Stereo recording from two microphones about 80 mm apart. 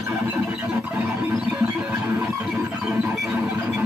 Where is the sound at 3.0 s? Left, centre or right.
Centre.